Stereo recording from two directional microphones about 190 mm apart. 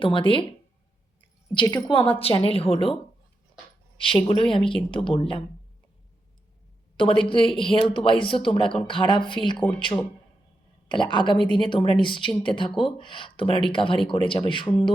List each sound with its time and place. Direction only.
0.0 s speech: 25° left (ahead or behind)
1.5 s speech: 25° left (ahead or behind)
4.5 s speech: 25° left (ahead or behind)
6.9 s speech: 25° left (ahead or behind)